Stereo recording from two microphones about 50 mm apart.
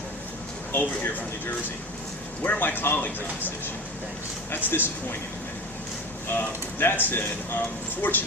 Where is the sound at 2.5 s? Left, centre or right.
Left.